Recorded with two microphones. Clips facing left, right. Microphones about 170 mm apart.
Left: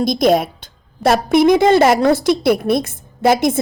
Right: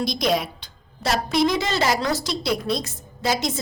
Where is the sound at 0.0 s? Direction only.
50° left (ahead or behind).